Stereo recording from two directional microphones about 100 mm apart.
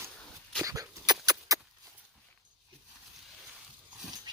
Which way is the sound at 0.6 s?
35° right (ahead or behind).